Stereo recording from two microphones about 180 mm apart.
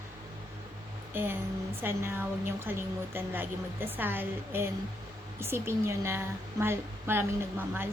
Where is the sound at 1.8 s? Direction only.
10° right (ahead or behind).